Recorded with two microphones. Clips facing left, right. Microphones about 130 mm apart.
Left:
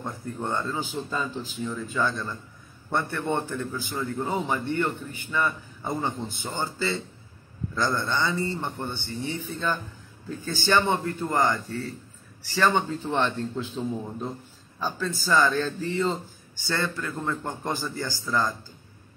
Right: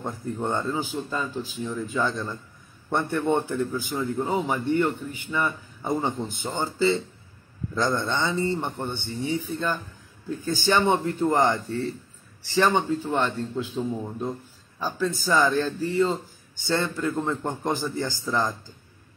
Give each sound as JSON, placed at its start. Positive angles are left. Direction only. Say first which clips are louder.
{"t": 0.0, "sound": "a man's voice", "louder": "right 3 dB", "side_deg": -20}
{"t": 0.9, "sound": "a man's voice", "louder": "right 1 dB", "side_deg": 0}
{"t": 1.7, "sound": "a man's voice", "louder": "right 1 dB", "side_deg": -15}
{"t": 4.2, "sound": "a man's voice", "louder": "right 1 dB", "side_deg": -5}
{"t": 13.1, "sound": "a man's voice", "louder": "left 3 dB", "side_deg": -5}
{"t": 16.5, "sound": "a man's voice", "louder": "right 3 dB", "side_deg": -20}